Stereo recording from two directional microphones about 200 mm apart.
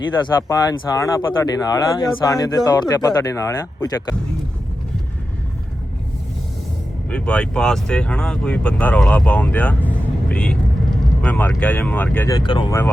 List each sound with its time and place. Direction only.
0.4 s speech: 20° left (ahead or behind)
7.1 s speech: 5° left (ahead or behind)
12.4 s speech: 25° left (ahead or behind)